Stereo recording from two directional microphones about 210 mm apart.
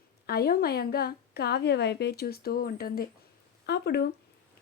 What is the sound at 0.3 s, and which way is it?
A woman's voice, 45° left (ahead or behind).